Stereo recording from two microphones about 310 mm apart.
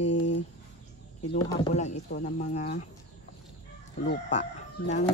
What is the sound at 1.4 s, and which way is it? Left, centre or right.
Speech, centre.